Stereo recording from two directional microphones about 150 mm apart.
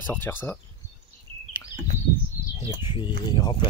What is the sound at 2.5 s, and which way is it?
Speech, 35° left (ahead or behind).